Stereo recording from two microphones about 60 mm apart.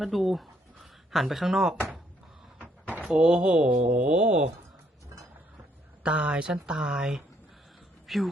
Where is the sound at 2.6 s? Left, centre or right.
Right.